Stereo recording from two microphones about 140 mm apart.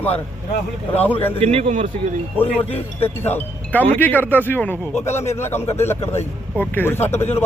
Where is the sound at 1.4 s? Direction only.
45° right (ahead or behind).